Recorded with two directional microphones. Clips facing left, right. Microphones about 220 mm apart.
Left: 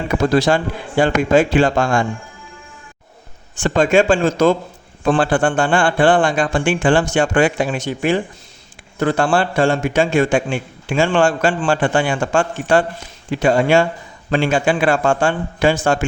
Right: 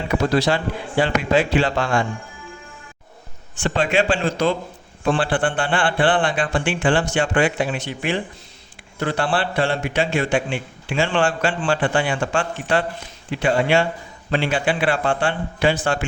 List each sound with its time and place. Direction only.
0.2 s a man's voice: 45° left (ahead or behind)
3.5 s a man's voice: 45° left (ahead or behind)